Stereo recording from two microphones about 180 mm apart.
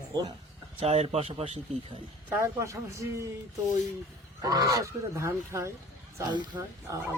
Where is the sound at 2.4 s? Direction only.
15° right (ahead or behind).